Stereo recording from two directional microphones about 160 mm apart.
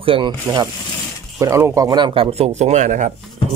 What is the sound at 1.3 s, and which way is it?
Speech, 20° right (ahead or behind).